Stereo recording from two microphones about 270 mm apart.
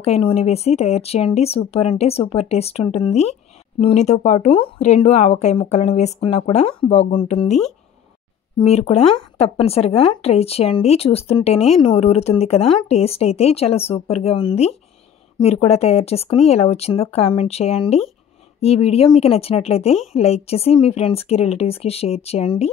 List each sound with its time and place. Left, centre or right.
0.0 s speech: left
8.6 s speech: left